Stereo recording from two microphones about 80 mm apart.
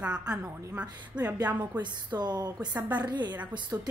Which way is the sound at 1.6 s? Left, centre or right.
Right.